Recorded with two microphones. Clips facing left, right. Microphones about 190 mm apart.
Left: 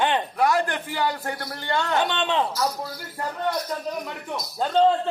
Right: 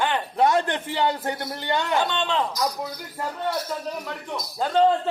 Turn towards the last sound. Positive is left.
turn(degrees=0)  # may be behind; listen again after turning